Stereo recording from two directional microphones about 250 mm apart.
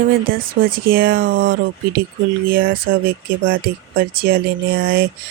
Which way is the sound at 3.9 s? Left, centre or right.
Right.